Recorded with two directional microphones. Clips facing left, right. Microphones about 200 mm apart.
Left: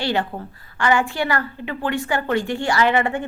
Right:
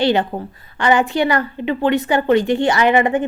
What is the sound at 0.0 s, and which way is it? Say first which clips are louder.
A woman's voice: right 6 dB; 20° right (ahead or behind).